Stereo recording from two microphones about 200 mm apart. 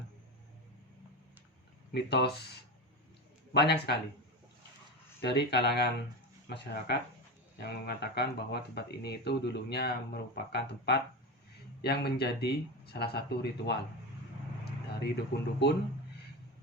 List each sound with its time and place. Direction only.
1.9 s speech: 55° left (ahead or behind)
5.2 s speech: 55° left (ahead or behind)
15.1 s speech: 55° left (ahead or behind)